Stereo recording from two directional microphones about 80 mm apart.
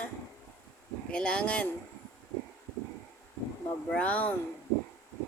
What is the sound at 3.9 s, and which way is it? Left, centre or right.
Speech, centre.